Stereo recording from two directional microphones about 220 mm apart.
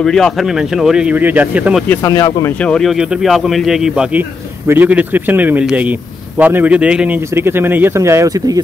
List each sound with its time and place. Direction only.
0.0 s speech: centre (ahead or behind)
1.9 s speech: 15° left (ahead or behind)
2.6 s speech: 5° left (ahead or behind); by 8.6 s 15° right (ahead or behind)